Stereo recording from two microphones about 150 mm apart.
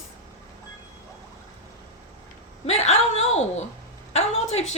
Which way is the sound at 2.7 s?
45° left (ahead or behind).